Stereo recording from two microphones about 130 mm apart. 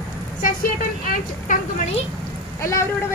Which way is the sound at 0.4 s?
90° left.